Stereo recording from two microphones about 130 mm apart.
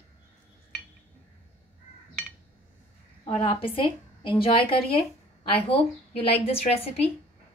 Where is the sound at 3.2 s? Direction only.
45° left (ahead or behind).